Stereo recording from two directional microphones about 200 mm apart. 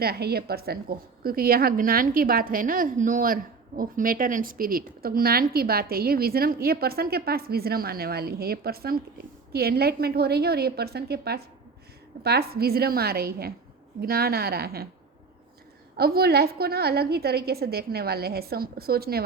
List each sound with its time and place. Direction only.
0.0 s a woman's voice: 50° right (ahead or behind)
16.0 s a woman's voice: 50° right (ahead or behind)